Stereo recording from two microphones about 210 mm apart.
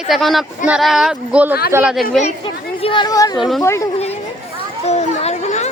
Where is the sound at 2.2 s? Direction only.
25° left (ahead or behind).